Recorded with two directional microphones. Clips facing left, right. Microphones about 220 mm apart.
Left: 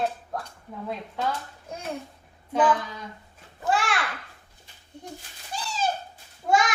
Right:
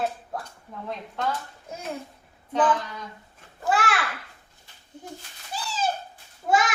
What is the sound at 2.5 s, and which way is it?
Speech, 10° left (ahead or behind).